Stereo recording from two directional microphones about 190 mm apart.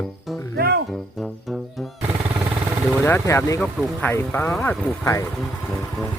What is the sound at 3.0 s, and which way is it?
Speech, 10° left (ahead or behind).